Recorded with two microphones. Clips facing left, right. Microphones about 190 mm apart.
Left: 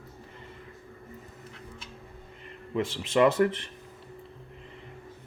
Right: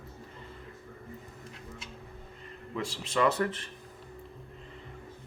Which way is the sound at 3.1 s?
25° left (ahead or behind).